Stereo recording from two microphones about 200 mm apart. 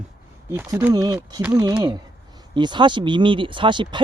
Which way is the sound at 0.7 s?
15° right (ahead or behind).